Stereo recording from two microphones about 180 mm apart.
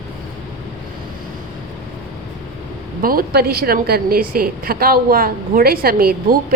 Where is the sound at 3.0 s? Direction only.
55° right (ahead or behind).